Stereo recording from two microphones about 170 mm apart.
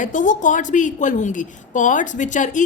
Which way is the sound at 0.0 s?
50° left (ahead or behind).